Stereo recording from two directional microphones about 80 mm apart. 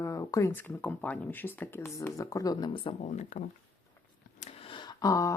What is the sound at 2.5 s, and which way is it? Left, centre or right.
Speech, left.